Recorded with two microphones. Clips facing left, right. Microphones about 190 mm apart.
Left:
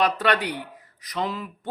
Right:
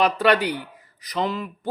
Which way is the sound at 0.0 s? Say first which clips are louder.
Right 3 dB; centre (ahead or behind).